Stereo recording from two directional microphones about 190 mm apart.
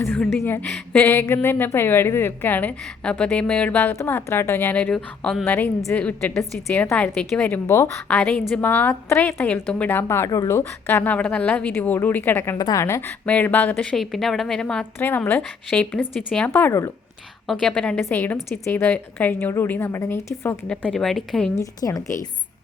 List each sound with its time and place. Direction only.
0.0 s a woman's voice: 10° left (ahead or behind)
21.5 s a woman's voice: 20° left (ahead or behind)